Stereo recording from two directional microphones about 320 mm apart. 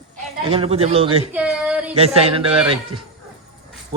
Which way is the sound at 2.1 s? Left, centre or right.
Centre.